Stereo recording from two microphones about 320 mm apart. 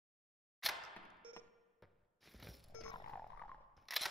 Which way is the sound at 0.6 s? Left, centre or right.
Centre.